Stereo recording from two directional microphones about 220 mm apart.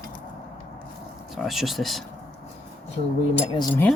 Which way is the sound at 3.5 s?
10° left (ahead or behind).